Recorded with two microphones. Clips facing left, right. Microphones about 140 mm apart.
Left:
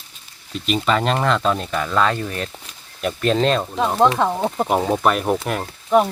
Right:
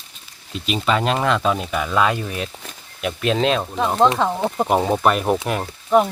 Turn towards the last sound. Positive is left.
turn(degrees=0)  # may be behind; listen again after turning